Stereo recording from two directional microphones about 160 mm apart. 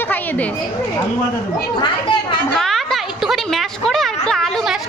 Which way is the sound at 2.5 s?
Centre (ahead or behind).